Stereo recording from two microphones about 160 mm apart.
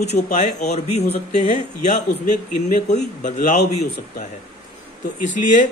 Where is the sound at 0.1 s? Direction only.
50° left (ahead or behind).